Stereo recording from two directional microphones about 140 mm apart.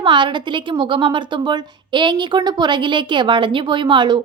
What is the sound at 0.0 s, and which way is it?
A woman's voice, 35° right (ahead or behind).